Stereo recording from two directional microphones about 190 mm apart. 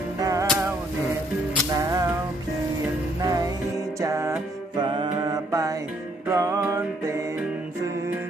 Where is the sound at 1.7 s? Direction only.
20° right (ahead or behind).